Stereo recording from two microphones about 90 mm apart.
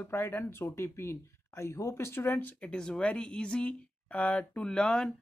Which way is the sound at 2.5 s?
10° left (ahead or behind).